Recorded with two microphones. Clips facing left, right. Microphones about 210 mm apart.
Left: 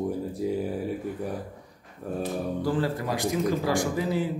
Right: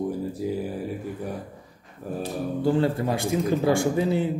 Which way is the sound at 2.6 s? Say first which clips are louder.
Right 7 dB; 25° right (ahead or behind).